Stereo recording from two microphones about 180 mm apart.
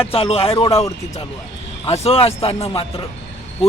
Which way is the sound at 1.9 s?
35° left (ahead or behind).